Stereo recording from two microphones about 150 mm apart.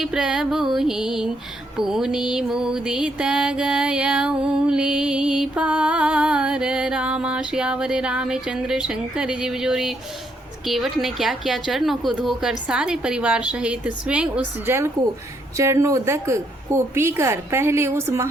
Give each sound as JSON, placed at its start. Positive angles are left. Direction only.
{"t": 0.0, "sound": "music", "side_deg": -5}
{"t": 15.5, "sound": "a woman's voice", "side_deg": -20}